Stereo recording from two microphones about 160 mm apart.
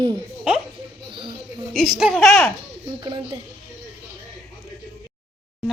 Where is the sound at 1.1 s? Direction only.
30° right (ahead or behind).